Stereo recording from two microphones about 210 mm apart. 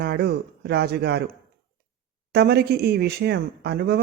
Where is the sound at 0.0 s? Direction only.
50° right (ahead or behind).